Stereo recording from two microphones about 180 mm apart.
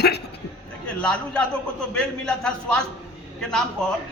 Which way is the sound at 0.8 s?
5° left (ahead or behind).